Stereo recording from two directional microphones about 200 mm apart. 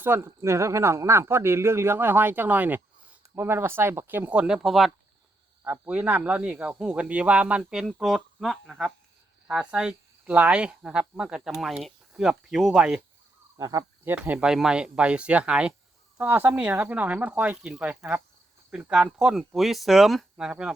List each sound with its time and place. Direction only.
0.0 s speech: 10° right (ahead or behind)
13.6 s speech: 20° right (ahead or behind)